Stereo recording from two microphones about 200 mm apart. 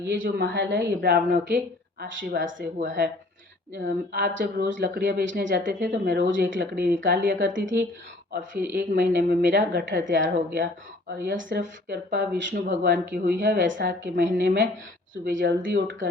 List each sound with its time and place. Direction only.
0.0 s a woman's voice: 60° right (ahead or behind)
5.9 s a woman's voice: 50° right (ahead or behind); by 7.9 s 65° right (ahead or behind)
8.7 s a woman's voice: 55° right (ahead or behind)